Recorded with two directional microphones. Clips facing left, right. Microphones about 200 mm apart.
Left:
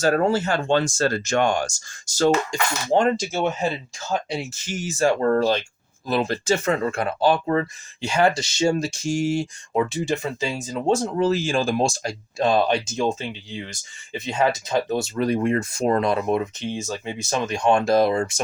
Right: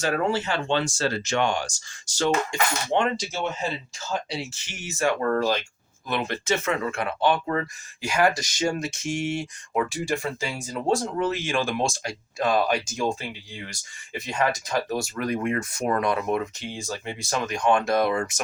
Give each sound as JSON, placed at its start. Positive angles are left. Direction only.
{"t": 0.0, "sound": "speech", "side_deg": 40}